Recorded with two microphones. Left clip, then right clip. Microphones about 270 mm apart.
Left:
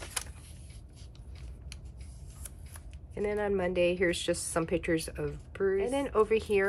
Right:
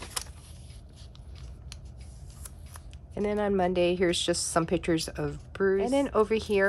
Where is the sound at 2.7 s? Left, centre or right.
Centre.